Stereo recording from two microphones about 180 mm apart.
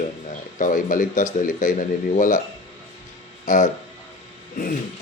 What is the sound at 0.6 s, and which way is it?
Speech, 45° left (ahead or behind).